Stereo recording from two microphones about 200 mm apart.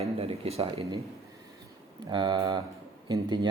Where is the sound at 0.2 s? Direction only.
30° right (ahead or behind).